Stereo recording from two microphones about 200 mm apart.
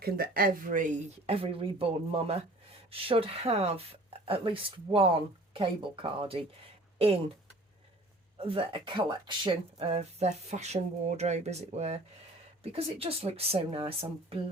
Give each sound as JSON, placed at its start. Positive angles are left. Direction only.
{"t": 0.0, "sound": "speech", "side_deg": -50}
{"t": 8.4, "sound": "speech", "side_deg": -30}